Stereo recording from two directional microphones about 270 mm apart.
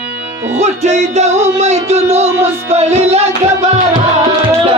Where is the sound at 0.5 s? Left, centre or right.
Right.